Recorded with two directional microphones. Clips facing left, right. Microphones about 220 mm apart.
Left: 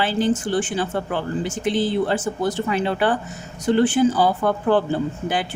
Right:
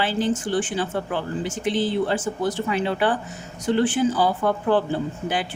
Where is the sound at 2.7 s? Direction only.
45° left (ahead or behind).